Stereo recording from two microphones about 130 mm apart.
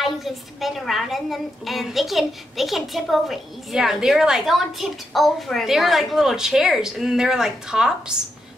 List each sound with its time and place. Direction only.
0.0 s a child's voice: centre (ahead or behind)